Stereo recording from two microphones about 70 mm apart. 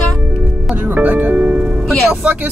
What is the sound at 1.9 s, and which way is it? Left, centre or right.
Speech, centre.